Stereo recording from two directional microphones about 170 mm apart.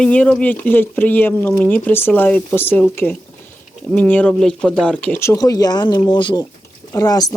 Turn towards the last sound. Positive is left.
turn(degrees=20)  # may be behind; listen again after turning